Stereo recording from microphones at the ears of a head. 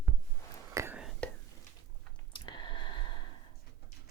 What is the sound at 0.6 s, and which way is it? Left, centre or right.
Whispering, right.